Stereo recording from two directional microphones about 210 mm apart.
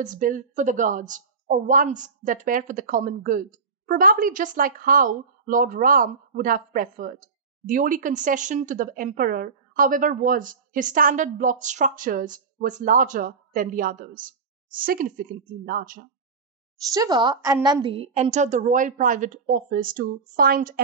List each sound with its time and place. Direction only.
0.0 s speech: 40° right (ahead or behind)
16.9 s speech: 20° right (ahead or behind); by 20.8 s 45° right (ahead or behind)